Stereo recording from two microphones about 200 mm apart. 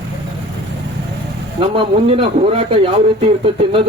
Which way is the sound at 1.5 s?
25° right (ahead or behind).